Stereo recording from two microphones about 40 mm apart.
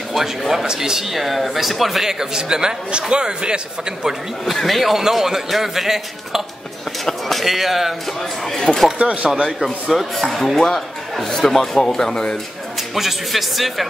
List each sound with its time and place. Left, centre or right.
0.7 s a man's voice: centre
1.1 s a man's voice: centre; by 4.1 s right
4.5 s a man's voice: centre
7.1 s speech: centre
8.5 s a man's voice: centre
8.9 s speech: right
9.9 s a man's voice: centre
12.9 s speech: centre